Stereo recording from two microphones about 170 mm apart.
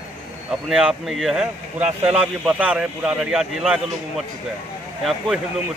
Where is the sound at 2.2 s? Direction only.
5° right (ahead or behind).